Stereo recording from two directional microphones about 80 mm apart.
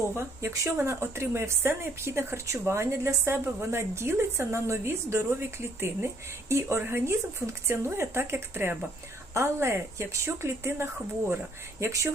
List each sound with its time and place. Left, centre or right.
0.2 s speech: right